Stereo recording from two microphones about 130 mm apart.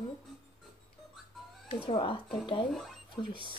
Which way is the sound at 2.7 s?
Centre (ahead or behind).